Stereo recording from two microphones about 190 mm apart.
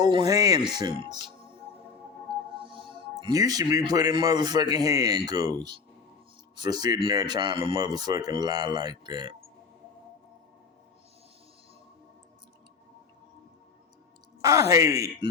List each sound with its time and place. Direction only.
0.0 s speech: 20° right (ahead or behind)
2.6 s speech: 25° right (ahead or behind)
14.4 s speech: 15° right (ahead or behind)